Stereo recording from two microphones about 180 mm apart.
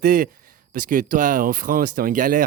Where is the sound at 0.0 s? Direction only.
50° right (ahead or behind).